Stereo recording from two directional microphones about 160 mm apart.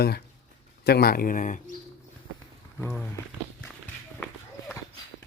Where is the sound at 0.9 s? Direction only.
80° left; by 1.6 s 55° left (ahead or behind).